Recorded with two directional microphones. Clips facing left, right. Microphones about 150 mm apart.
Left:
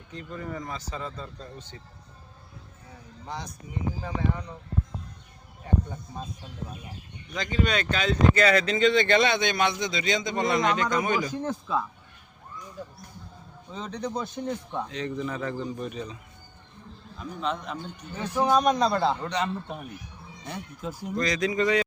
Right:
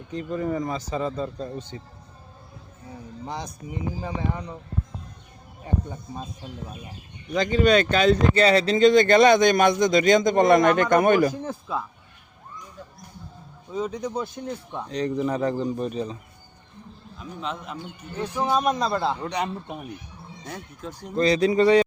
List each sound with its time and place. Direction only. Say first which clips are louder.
0.1 s speech: right 9 dB; 20° right (ahead or behind)
3.2 s speech: right 3 dB; 15° right (ahead or behind)
7.3 s speech: right 8 dB; 30° right (ahead or behind); by 11.3 s 60° right (ahead or behind)
13.7 s speech: right 5 dB; 10° right (ahead or behind)
14.8 s speech: right 11 dB; 35° right (ahead or behind)
17.2 s speech: left 2 dB; centre (ahead or behind)
20.4 s speech: left 1 dB; centre (ahead or behind)
21.2 s speech: right 7 dB; 30° right (ahead or behind)